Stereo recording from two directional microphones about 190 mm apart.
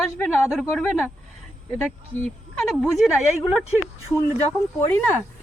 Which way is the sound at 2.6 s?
Centre (ahead or behind).